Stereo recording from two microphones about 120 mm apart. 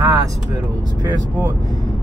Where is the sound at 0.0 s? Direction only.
30° right (ahead or behind).